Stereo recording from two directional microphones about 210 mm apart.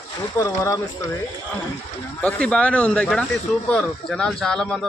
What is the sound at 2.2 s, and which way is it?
A man's voice, 5° left (ahead or behind).